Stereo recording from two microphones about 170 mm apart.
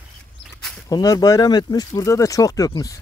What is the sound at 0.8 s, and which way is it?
Speech, 20° left (ahead or behind).